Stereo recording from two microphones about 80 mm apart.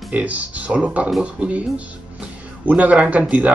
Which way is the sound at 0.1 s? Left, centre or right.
Centre.